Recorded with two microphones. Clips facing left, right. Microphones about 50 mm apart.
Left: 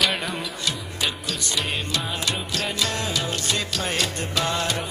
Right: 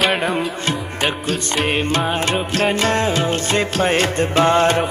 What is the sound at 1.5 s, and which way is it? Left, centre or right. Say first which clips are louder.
Music: right 9 dB; right.